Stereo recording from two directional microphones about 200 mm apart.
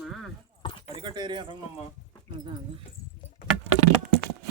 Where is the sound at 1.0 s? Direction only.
20° right (ahead or behind).